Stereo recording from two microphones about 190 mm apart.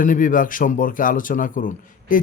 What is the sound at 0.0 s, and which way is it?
Speech, 45° left (ahead or behind).